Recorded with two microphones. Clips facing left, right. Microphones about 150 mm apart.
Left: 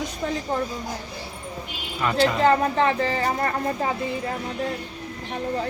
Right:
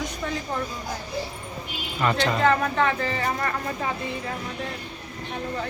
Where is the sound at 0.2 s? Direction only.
30° left (ahead or behind).